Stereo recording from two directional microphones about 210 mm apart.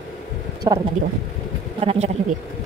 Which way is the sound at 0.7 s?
20° right (ahead or behind).